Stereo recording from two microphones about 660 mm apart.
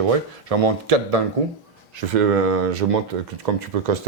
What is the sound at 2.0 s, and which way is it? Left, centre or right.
Speech, right.